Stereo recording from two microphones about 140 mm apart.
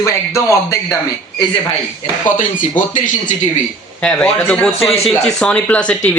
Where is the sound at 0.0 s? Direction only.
20° left (ahead or behind).